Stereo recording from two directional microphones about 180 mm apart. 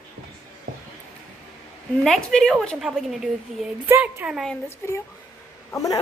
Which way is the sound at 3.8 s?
10° right (ahead or behind).